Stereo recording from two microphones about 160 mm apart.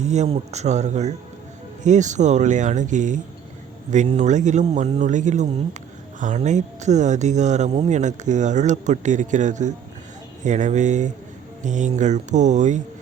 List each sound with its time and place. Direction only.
0.0 s speech: 45° right (ahead or behind)